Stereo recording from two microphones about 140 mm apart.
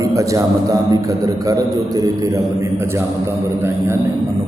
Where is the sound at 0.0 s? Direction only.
25° right (ahead or behind).